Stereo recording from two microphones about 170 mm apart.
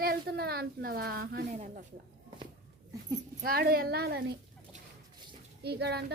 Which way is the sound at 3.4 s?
60° right (ahead or behind).